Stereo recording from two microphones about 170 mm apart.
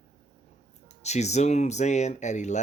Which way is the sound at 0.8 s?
40° left (ahead or behind).